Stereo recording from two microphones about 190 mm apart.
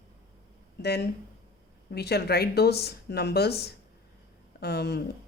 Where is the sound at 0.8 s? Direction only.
55° left (ahead or behind).